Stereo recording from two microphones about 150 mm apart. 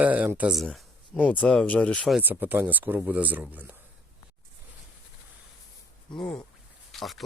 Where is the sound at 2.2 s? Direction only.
10° right (ahead or behind).